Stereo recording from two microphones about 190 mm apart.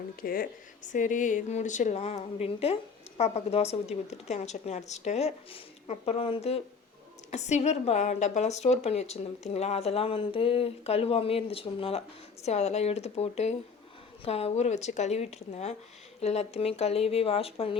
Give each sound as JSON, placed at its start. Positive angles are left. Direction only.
{"t": 0.2, "sound": "a woman's voice", "side_deg": 50}